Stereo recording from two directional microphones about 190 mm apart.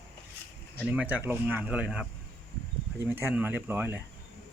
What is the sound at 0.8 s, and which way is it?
Speech, 5° right (ahead or behind).